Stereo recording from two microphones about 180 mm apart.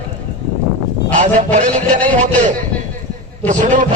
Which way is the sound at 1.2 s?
45° right (ahead or behind).